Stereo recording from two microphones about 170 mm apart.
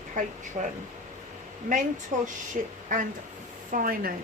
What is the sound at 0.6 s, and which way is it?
Speech, 35° right (ahead or behind).